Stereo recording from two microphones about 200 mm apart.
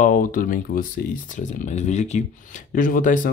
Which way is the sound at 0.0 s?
40° left (ahead or behind).